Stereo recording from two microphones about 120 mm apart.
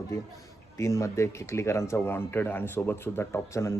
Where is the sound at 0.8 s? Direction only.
25° left (ahead or behind).